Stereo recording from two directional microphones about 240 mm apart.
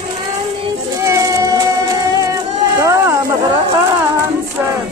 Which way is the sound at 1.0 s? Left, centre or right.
Centre.